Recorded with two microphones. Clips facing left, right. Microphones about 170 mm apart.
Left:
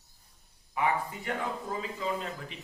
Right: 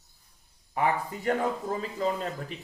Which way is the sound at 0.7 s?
40° right (ahead or behind).